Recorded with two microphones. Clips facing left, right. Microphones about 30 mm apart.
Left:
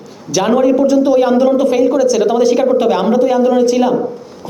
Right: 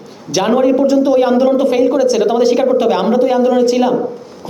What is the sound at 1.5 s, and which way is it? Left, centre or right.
Speech, right.